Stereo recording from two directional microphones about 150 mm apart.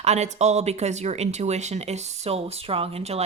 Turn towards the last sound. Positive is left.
turn(degrees=-45)  # may be behind; listen again after turning